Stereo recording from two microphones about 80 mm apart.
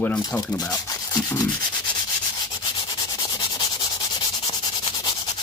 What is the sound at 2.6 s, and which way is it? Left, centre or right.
Sanding, left.